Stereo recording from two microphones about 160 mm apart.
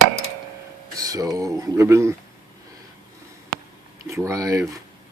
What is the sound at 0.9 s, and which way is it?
Speech, 20° right (ahead or behind).